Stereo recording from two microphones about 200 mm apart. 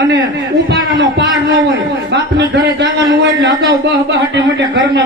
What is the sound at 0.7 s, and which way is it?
A man's voice, 60° right (ahead or behind).